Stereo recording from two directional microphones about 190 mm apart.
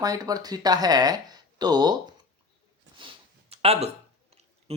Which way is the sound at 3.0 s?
30° right (ahead or behind).